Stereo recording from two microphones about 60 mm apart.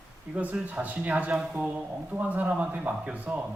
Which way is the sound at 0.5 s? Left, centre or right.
Right.